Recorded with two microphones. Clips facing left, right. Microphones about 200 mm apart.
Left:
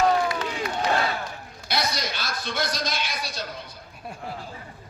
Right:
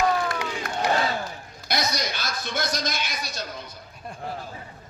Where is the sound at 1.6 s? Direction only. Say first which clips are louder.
Right 1 dB; 45° right (ahead or behind).